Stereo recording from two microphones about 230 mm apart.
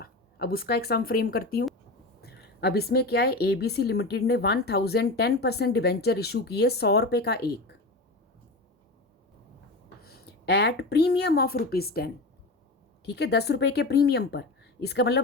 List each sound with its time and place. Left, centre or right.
0.0 s speech: left
10.0 s a woman's voice: left
13.1 s speech: left